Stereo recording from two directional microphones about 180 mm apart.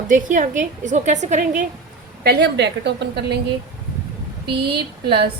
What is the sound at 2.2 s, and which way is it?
A woman's voice, 65° right (ahead or behind).